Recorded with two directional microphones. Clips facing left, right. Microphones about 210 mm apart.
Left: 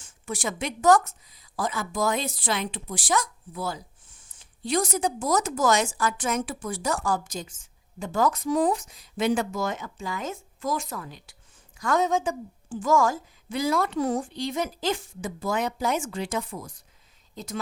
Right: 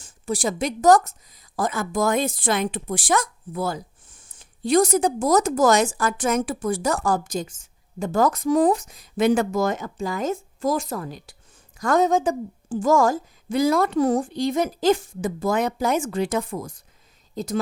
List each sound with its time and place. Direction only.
0.0 s a woman's voice: 35° right (ahead or behind)
17.3 s speech: 35° right (ahead or behind)